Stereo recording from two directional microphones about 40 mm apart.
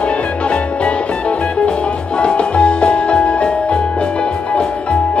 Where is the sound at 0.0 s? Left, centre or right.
Left.